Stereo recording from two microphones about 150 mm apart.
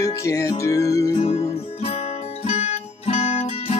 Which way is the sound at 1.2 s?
45° left (ahead or behind).